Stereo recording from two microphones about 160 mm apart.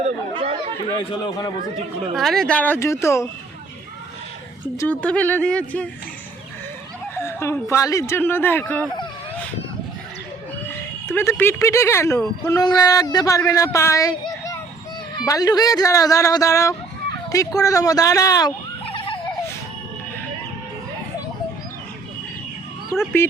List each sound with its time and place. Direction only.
0.3 s chatter: 35° right (ahead or behind)
1.1 s speech: 25° left (ahead or behind)
2.1 s speech: centre (ahead or behind); by 3.2 s 15° left (ahead or behind)
4.6 s speech: 10° left (ahead or behind)
7.2 s speech: 15° left (ahead or behind)
10.7 s speech: 15° left (ahead or behind)
18.9 s a sound: 35° left (ahead or behind)
22.9 s speech: 15° left (ahead or behind)